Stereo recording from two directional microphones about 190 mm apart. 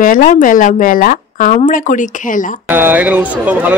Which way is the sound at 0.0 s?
45° left (ahead or behind).